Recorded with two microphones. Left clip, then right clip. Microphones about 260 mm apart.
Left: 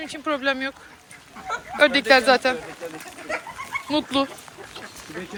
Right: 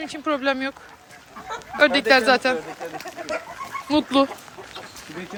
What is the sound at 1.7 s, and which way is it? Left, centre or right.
Speech, centre.